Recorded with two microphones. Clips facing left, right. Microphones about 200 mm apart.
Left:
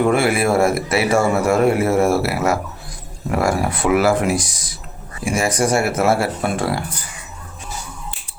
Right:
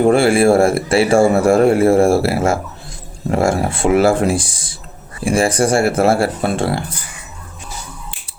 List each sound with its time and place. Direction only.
0.0 s speech: 30° right (ahead or behind)